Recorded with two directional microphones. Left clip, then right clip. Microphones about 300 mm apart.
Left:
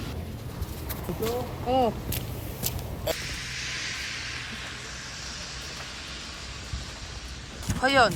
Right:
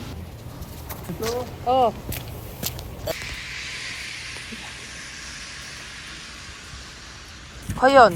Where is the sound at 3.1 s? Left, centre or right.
Centre.